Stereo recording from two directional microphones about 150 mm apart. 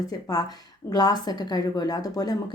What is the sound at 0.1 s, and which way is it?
Speech, 25° left (ahead or behind).